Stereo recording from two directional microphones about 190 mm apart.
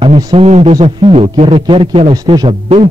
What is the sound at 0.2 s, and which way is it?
A man's voice, 30° right (ahead or behind).